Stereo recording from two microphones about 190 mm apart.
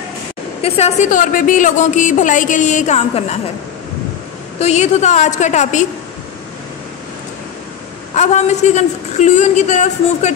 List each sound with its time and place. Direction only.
0.6 s a woman's voice: 30° left (ahead or behind)
4.6 s a woman's voice: 35° left (ahead or behind)
8.1 s a woman's voice: 35° left (ahead or behind)